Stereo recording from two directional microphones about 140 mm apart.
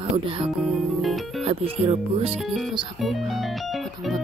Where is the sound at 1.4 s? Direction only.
45° right (ahead or behind).